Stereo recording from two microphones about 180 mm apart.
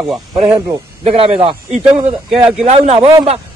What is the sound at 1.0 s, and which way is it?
Speech, 35° right (ahead or behind).